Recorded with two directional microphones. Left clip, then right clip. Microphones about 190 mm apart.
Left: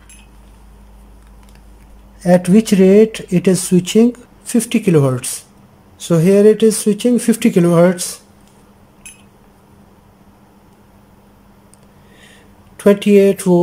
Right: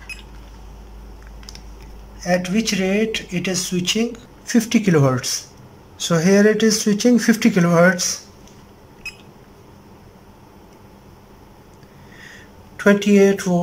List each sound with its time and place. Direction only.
2.2 s speech: 35° left (ahead or behind)
4.5 s speech: 10° left (ahead or behind)
5.9 s speech: 15° left (ahead or behind)
12.7 s speech: 20° left (ahead or behind)